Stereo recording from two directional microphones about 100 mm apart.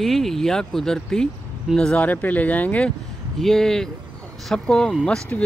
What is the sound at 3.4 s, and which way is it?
Speech, 5° left (ahead or behind).